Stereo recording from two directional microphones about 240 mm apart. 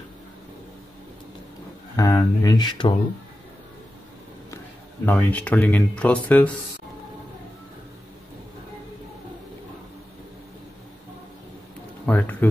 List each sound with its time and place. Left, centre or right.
2.0 s speech: centre
5.0 s speech: centre
12.1 s music: centre